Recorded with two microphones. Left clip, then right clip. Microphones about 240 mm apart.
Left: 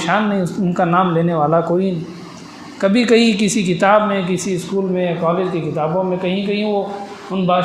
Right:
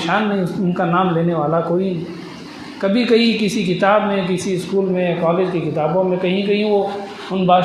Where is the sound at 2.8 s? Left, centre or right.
Left.